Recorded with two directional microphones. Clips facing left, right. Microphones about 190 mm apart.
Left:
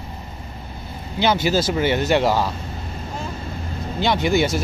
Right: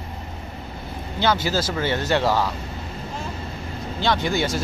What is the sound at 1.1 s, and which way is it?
Speech, 15° left (ahead or behind).